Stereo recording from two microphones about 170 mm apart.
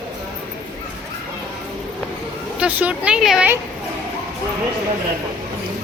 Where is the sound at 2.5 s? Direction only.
10° right (ahead or behind).